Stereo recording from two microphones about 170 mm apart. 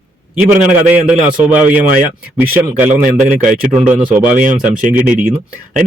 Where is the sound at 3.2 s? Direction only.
10° right (ahead or behind).